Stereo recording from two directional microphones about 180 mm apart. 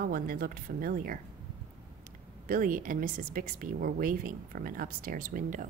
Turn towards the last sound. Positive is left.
turn(degrees=-45)  # may be behind; listen again after turning